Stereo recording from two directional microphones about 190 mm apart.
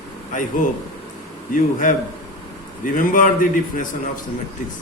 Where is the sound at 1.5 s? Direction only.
45° left (ahead or behind).